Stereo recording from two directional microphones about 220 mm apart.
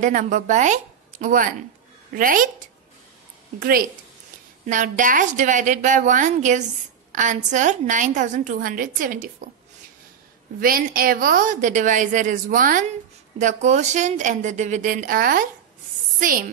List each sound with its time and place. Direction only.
0.0 s a woman's voice: 35° right (ahead or behind)
3.5 s a woman's voice: 40° right (ahead or behind)
10.6 s a woman's voice: 40° right (ahead or behind)